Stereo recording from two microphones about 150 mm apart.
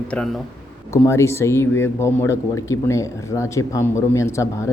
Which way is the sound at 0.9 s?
20° left (ahead or behind).